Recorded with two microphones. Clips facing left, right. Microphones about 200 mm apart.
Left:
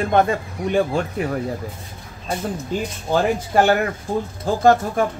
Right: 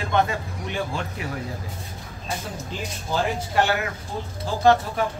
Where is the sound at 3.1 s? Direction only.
50° left (ahead or behind).